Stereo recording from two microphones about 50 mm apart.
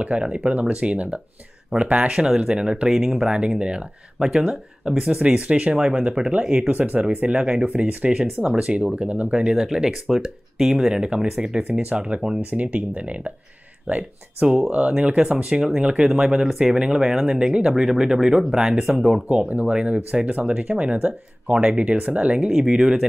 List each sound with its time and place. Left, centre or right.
0.0 s speech: right
6.9 s speech: right; by 8.7 s centre
8.7 s speech: right
12.4 s speech: right; by 19.2 s centre
19.2 s speech: right